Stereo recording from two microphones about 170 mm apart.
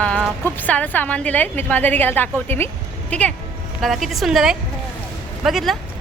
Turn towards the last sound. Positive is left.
turn(degrees=0)  # may be behind; listen again after turning